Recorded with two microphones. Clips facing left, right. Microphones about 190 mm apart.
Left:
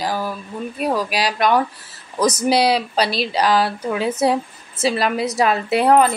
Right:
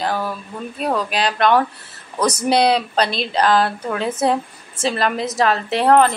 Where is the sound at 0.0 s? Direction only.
5° left (ahead or behind).